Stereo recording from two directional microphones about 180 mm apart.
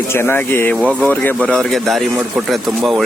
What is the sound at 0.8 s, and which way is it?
Speech, 5° right (ahead or behind).